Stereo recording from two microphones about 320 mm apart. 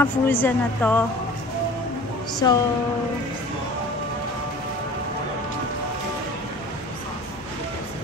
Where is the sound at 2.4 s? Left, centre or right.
Centre.